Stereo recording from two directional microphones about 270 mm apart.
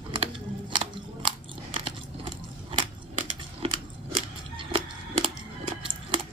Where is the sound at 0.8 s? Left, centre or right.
Centre.